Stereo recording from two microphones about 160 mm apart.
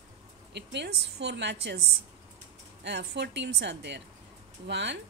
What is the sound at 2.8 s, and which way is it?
Speech, 90° right.